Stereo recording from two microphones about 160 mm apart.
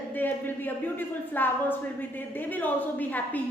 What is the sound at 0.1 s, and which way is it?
A woman's voice, 10° left (ahead or behind).